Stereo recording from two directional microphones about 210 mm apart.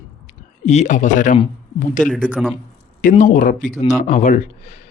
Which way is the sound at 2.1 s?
Centre (ahead or behind).